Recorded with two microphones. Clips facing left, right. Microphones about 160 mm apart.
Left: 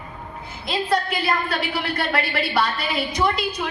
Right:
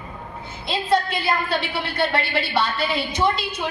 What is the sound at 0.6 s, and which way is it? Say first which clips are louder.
A woman's voice: right 1 dB; 25° right (ahead or behind).